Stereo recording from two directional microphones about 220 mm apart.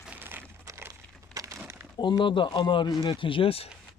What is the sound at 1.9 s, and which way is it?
Speech, 20° left (ahead or behind).